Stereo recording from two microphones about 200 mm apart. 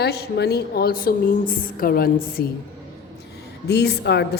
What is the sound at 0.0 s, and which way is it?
A woman's voice, 55° left (ahead or behind).